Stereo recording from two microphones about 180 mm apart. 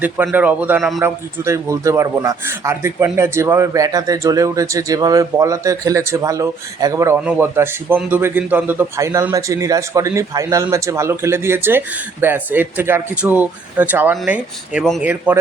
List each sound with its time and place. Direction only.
0.0 s a man's voice: 10° right (ahead or behind)
0.9 s a man's voice: 15° right (ahead or behind)